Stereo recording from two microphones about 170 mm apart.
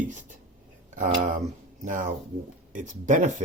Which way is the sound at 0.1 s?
50° right (ahead or behind).